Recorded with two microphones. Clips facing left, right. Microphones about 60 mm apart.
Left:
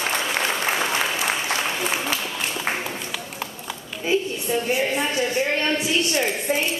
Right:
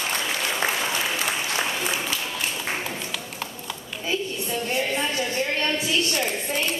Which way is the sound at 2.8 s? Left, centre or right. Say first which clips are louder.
Left 1 dB; centre.